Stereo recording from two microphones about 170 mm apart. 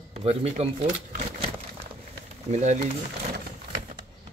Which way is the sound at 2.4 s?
40° right (ahead or behind).